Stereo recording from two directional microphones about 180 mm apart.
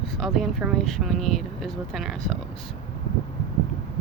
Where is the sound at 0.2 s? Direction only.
Centre (ahead or behind).